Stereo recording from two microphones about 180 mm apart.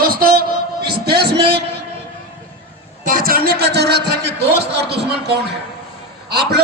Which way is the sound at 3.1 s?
55° right (ahead or behind).